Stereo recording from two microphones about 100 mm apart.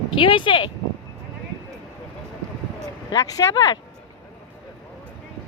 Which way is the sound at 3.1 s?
40° left (ahead or behind).